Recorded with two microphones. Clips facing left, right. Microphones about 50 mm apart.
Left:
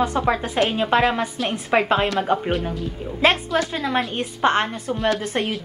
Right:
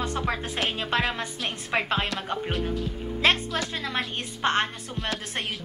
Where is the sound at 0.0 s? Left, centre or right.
Centre.